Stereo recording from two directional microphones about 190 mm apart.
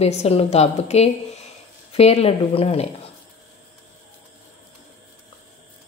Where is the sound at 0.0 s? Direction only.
30° left (ahead or behind).